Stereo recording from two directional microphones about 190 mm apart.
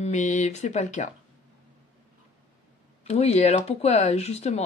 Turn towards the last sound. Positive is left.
turn(degrees=35)  # may be behind; listen again after turning